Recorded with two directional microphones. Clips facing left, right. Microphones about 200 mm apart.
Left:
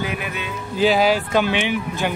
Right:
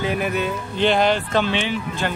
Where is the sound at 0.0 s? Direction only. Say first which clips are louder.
Right 4 dB; 35° right (ahead or behind).